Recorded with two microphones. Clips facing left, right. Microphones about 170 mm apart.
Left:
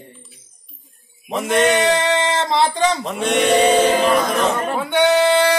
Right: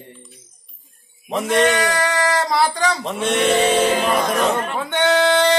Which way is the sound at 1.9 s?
25° left (ahead or behind).